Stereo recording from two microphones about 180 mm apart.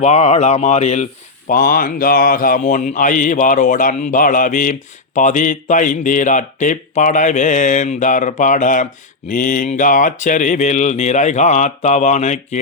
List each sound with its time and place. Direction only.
0.0 s speech: 35° left (ahead or behind)
1.5 s speech: 50° left (ahead or behind)